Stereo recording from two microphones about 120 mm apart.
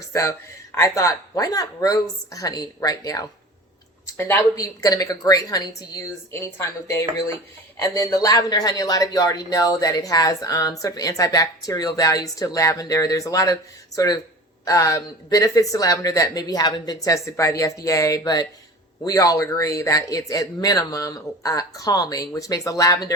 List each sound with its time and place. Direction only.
0.0 s speech: 25° left (ahead or behind)
4.2 s speech: 20° left (ahead or behind)
4.5 s speech: 30° left (ahead or behind)